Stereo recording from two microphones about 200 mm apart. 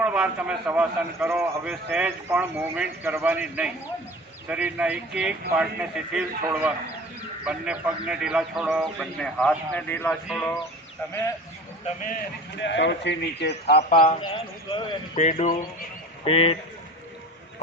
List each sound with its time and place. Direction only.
0.0 s a man's voice: 5° right (ahead or behind)
11.9 s speech: 40° left (ahead or behind)
12.5 s a man's voice: 65° left (ahead or behind)
14.7 s a man's voice: 25° left (ahead or behind)
15.2 s a man's voice: 35° left (ahead or behind)